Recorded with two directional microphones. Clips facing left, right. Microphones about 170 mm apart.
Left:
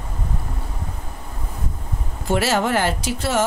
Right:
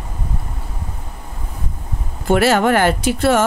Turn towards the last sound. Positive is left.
turn(degrees=-60)  # may be behind; listen again after turning